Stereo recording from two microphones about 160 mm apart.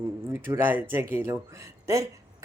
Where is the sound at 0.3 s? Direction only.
15° right (ahead or behind).